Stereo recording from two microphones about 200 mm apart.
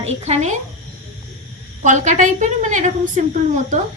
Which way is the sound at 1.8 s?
40° right (ahead or behind).